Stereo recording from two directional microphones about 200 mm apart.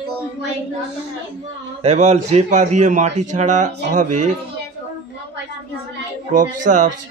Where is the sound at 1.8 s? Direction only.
35° right (ahead or behind).